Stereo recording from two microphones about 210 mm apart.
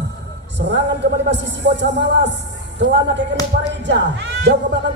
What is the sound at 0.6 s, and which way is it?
A woman's voice, 55° right (ahead or behind).